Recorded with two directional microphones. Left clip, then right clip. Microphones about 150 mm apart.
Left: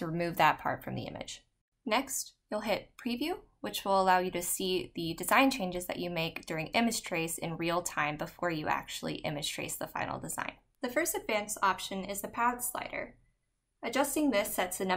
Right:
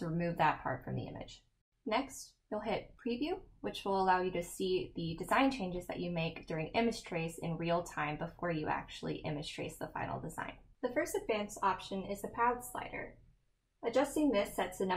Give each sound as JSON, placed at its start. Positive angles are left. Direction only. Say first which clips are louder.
{"t": 0.0, "sound": "speech", "louder": "left 5 dB", "side_deg": 20}
{"t": 2.5, "sound": "a woman's voice", "louder": "left 4 dB", "side_deg": 15}